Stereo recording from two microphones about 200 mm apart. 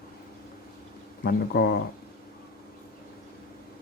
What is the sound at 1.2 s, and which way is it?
Speech, 55° left (ahead or behind).